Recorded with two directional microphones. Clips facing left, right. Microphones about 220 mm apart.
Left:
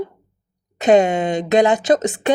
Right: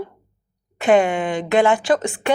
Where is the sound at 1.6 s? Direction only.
20° left (ahead or behind).